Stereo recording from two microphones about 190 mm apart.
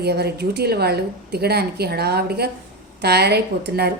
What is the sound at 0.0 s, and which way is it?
A woman's voice, 60° right (ahead or behind).